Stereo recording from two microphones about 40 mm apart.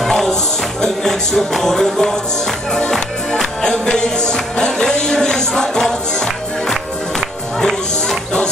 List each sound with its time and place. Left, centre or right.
0.0 s music: centre
3.6 s music: centre